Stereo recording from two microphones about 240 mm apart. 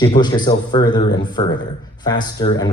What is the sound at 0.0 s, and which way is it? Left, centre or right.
Speech, centre.